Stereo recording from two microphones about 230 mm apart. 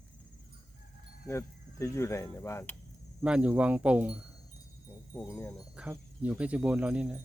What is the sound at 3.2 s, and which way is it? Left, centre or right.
Speech, centre.